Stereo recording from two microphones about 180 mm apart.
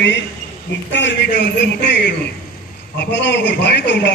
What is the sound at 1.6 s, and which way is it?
A man's voice, 70° left (ahead or behind).